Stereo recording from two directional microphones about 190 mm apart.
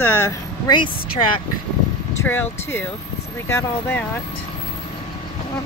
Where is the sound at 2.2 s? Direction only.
10° left (ahead or behind).